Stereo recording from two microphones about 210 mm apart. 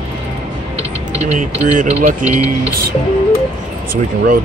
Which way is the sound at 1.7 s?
40° right (ahead or behind).